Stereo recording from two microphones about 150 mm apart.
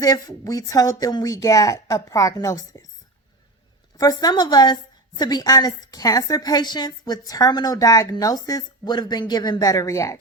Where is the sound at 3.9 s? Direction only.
25° left (ahead or behind).